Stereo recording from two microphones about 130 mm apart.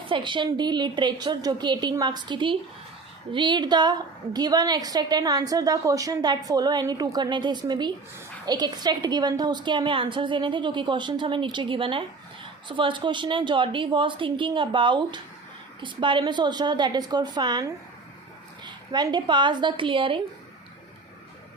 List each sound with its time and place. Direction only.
0.1 s a woman's voice: 40° right (ahead or behind)